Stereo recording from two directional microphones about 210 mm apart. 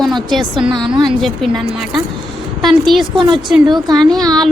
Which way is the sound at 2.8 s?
Centre (ahead or behind).